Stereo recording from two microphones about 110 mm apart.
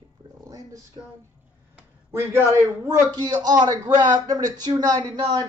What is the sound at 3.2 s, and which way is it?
A man's voice, 40° right (ahead or behind).